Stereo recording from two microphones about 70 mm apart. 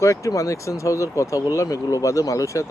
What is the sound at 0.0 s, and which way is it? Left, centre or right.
Speech, left.